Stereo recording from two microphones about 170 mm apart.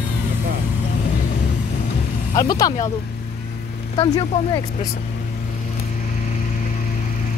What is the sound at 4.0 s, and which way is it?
Speech, 30° left (ahead or behind).